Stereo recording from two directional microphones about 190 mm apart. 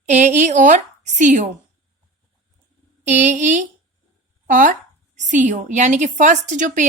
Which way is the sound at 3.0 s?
40° right (ahead or behind).